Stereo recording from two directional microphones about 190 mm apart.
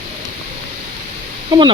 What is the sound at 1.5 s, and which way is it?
Speech, 25° right (ahead or behind).